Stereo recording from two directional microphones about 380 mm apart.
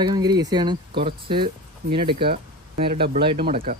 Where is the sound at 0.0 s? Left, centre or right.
Centre.